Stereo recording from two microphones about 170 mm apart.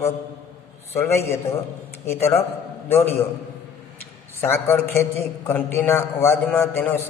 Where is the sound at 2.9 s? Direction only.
15° left (ahead or behind).